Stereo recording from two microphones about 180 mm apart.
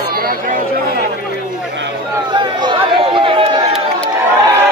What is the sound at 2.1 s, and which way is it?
Chatter, 25° right (ahead or behind).